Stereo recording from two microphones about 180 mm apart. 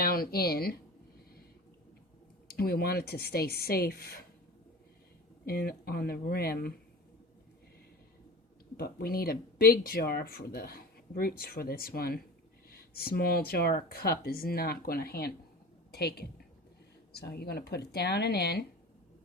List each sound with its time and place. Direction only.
0.0 s speech: 55° left (ahead or behind)
2.5 s speech: 60° left (ahead or behind)
5.5 s speech: 60° left (ahead or behind)
8.7 s speech: 60° left (ahead or behind)